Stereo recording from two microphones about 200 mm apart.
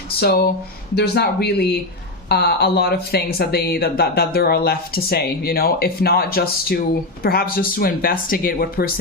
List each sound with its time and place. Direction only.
0.2 s speech: 50° left (ahead or behind)